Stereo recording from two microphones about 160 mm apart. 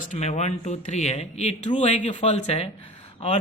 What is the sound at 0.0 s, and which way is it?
Speech, 50° left (ahead or behind).